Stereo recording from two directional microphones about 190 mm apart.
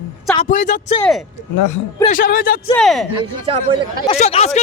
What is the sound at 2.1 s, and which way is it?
Speech, 45° left (ahead or behind).